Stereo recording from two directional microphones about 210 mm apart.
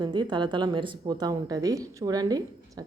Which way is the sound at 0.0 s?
20° right (ahead or behind).